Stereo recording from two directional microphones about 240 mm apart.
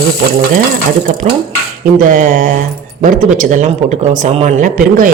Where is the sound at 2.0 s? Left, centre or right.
Right.